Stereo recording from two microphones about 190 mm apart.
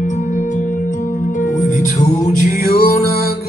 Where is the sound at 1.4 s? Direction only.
40° left (ahead or behind).